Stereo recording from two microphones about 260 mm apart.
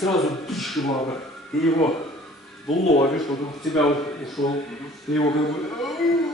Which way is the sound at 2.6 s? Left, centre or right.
Left.